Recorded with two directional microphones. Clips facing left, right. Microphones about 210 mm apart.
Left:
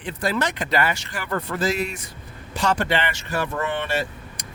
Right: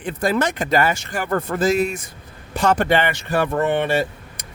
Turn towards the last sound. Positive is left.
turn(degrees=-55)  # may be behind; listen again after turning